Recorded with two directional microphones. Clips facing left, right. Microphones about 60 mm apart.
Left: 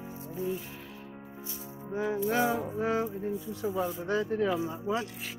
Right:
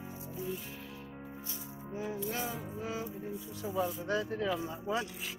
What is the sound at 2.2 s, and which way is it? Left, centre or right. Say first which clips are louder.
Music: left 10 dB; left.